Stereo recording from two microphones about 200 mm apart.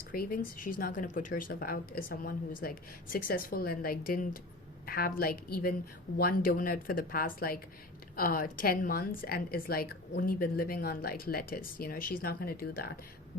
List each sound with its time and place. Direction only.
0.1 s a woman's voice: 45° left (ahead or behind)